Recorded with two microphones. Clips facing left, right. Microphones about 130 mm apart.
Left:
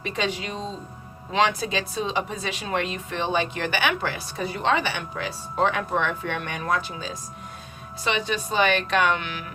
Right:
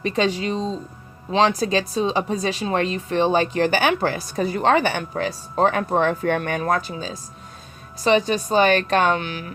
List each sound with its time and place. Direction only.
0.0 s speech: 35° right (ahead or behind)